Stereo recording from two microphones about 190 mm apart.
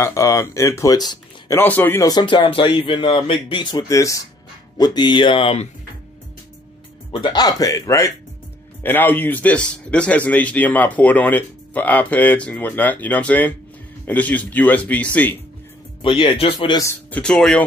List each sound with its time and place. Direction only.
0.0 s speech: 15° left (ahead or behind)
7.1 s a man's voice: 25° left (ahead or behind); by 15.0 s 5° left (ahead or behind)
16.0 s speech: 25° left (ahead or behind)
17.1 s speech: 5° left (ahead or behind)